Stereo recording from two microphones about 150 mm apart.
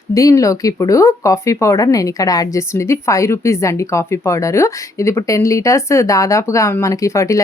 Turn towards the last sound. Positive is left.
turn(degrees=20)  # may be behind; listen again after turning